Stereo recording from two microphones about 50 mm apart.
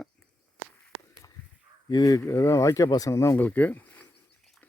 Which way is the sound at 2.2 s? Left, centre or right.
Left.